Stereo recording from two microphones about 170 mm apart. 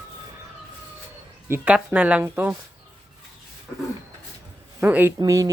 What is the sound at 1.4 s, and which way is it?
Speech, 10° right (ahead or behind).